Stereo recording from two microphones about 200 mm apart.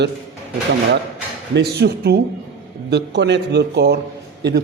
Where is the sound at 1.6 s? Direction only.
55° right (ahead or behind).